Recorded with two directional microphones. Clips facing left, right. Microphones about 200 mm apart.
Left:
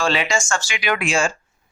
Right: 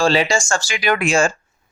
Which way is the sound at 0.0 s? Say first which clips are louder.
Right 4 dB; 35° right (ahead or behind).